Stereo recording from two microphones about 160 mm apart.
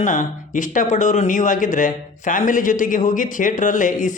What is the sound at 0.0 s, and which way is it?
Speech, 55° left (ahead or behind).